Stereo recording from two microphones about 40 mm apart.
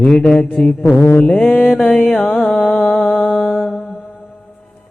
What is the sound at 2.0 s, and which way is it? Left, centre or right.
Carnatic music, centre.